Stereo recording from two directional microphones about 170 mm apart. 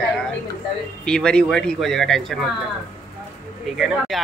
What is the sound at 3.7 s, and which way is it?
Speech, 5° right (ahead or behind).